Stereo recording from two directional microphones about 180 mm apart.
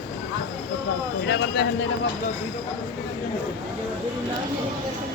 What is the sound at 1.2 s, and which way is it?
Speech, 70° left (ahead or behind).